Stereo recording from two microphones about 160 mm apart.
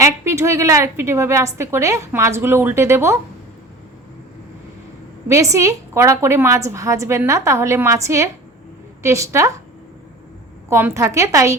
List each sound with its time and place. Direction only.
0.0 s a woman's voice: 15° right (ahead or behind)
5.3 s a woman's voice: 20° right (ahead or behind)
10.7 s a woman's voice: 15° right (ahead or behind)